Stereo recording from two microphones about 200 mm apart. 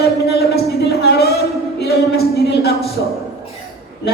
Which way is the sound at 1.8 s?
50° left (ahead or behind).